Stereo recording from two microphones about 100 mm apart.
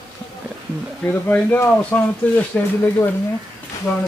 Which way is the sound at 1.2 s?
20° left (ahead or behind).